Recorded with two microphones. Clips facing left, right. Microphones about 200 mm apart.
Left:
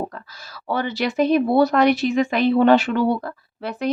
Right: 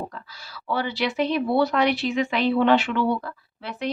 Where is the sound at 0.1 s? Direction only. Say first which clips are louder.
Left 2 dB; 45° left (ahead or behind).